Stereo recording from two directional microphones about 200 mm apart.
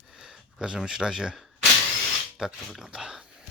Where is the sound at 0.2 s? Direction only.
5° right (ahead or behind).